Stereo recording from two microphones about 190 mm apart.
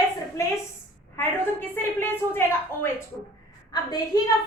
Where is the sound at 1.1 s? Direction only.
10° left (ahead or behind).